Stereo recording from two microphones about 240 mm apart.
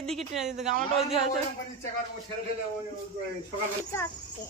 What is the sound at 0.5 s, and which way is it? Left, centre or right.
Speech, right.